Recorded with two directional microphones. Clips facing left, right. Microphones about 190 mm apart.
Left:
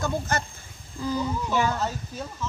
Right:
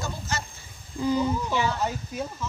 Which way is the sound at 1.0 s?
20° right (ahead or behind).